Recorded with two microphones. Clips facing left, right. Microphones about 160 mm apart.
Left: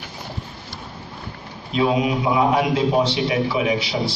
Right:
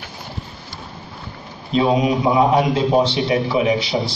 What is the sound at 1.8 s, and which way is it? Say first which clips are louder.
A man's voice: right 3 dB; 35° right (ahead or behind).